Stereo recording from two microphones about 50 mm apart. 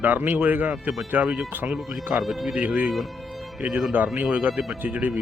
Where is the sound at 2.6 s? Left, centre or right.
Right.